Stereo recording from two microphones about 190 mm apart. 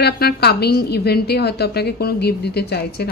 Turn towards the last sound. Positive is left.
turn(degrees=55)  # may be behind; listen again after turning